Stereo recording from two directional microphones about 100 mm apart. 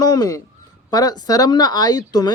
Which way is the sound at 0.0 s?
40° left (ahead or behind).